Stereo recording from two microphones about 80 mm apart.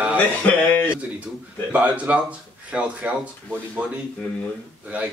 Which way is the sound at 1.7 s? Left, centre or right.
Centre.